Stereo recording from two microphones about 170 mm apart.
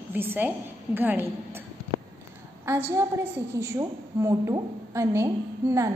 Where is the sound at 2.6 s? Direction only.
15° right (ahead or behind).